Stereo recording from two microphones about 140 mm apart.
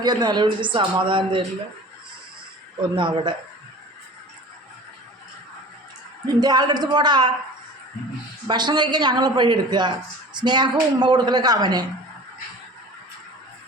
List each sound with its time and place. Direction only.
0.0 s speech: 30° right (ahead or behind)
2.9 s speech: 35° right (ahead or behind)
6.2 s a woman's voice: 30° right (ahead or behind)
8.4 s speech: 30° right (ahead or behind)